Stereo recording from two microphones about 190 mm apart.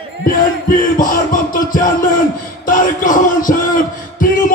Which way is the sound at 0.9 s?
45° left (ahead or behind).